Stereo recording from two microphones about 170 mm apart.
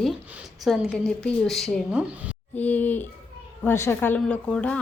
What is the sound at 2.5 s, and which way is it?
A woman's voice, 10° left (ahead or behind).